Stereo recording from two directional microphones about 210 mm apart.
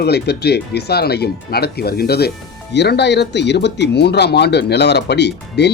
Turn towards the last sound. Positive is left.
turn(degrees=55)  # may be behind; listen again after turning